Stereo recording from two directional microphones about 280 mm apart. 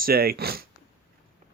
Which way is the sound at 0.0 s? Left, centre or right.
Right.